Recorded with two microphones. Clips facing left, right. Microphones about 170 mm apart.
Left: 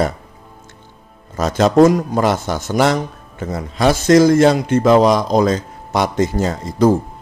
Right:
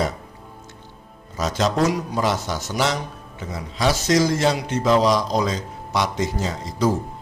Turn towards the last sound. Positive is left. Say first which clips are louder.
# left 7 dB
turn(degrees=50)  # may be behind; listen again after turning